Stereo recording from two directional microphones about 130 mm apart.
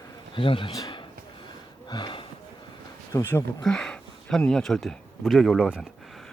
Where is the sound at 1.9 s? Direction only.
35° left (ahead or behind).